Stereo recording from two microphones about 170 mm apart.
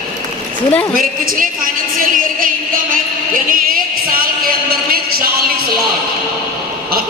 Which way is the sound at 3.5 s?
55° right (ahead or behind).